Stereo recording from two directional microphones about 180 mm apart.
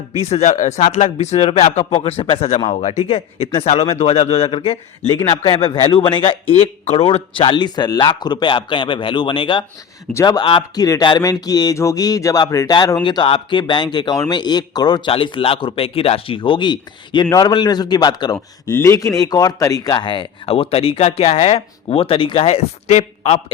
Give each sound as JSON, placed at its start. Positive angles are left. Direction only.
{"t": 0.2, "sound": "speech", "side_deg": 35}